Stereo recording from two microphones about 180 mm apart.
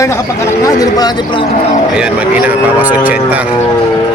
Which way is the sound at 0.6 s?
20° left (ahead or behind).